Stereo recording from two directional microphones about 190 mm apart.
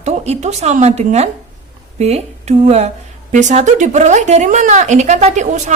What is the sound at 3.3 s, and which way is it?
A woman's voice, 40° right (ahead or behind).